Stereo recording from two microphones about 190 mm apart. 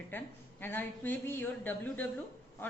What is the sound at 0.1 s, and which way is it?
Speech, 10° left (ahead or behind).